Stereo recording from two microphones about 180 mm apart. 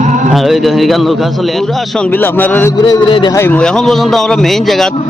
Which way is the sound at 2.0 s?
10° left (ahead or behind).